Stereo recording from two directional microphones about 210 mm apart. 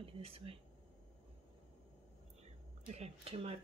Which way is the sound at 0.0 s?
25° right (ahead or behind).